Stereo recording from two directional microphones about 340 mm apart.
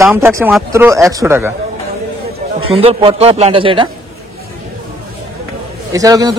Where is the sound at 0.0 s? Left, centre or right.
Centre.